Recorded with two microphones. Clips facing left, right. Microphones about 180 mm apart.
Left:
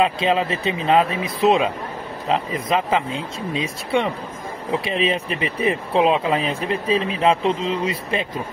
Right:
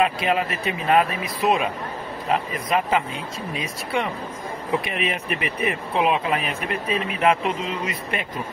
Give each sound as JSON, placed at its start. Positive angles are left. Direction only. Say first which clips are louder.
{"t": 0.0, "sound": "speech", "louder": "left 2 dB", "side_deg": 25}